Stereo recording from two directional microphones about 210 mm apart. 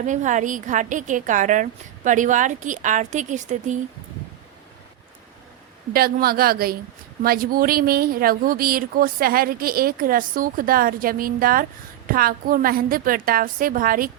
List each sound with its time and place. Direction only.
0.0 s a woman's voice: 35° right (ahead or behind)
5.9 s speech: 45° right (ahead or behind)